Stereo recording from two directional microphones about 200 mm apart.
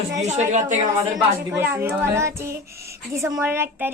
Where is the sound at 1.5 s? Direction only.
10° right (ahead or behind).